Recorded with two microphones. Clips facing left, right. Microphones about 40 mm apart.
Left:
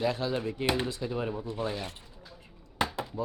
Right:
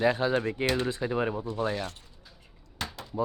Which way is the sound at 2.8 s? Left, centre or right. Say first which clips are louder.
Left 6 dB; centre.